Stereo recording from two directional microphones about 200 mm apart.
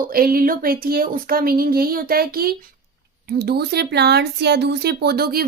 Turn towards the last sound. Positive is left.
turn(degrees=-50)  # may be behind; listen again after turning